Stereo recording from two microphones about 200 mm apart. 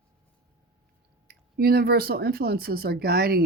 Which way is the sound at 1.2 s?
50° right (ahead or behind).